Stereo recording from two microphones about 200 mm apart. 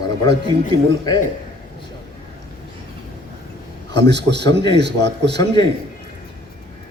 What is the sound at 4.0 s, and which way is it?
Speech, 60° right (ahead or behind).